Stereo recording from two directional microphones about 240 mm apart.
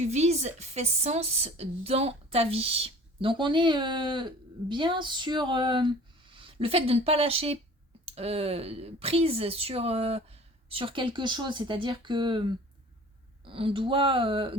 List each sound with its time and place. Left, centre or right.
0.0 s a woman's voice: right